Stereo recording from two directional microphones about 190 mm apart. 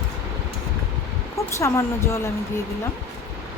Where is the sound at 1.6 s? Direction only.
15° left (ahead or behind).